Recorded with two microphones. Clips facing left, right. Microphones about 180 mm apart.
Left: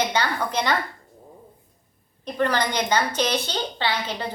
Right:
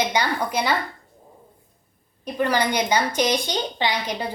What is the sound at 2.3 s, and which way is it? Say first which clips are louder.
A woman's voice: right 1 dB; 10° right (ahead or behind).